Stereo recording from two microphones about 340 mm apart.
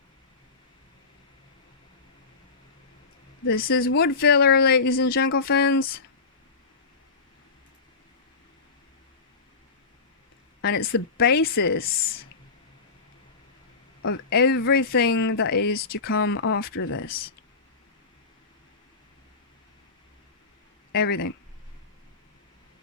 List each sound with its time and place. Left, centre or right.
3.4 s speech: left
10.6 s speech: left
14.0 s speech: left
20.9 s speech: left